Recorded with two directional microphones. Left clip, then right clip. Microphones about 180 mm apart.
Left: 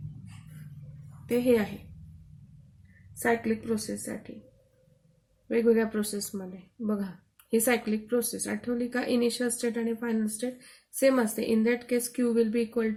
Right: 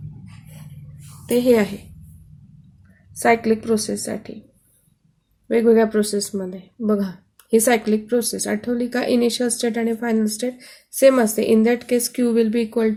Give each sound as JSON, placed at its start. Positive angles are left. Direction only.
{"t": 1.3, "sound": "speech", "side_deg": -25}
{"t": 3.2, "sound": "speech", "side_deg": -20}
{"t": 5.5, "sound": "speech", "side_deg": -20}